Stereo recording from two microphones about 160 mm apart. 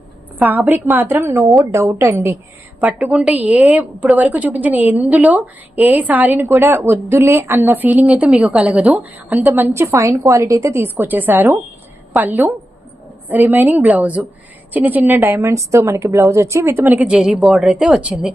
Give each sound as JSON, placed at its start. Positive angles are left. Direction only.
{"t": 0.3, "sound": "a woman's voice", "side_deg": -10}